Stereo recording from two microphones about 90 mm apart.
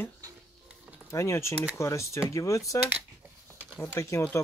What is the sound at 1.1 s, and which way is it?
Speech, 30° left (ahead or behind).